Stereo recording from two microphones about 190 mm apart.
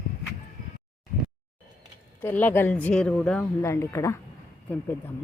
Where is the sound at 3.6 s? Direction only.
15° left (ahead or behind).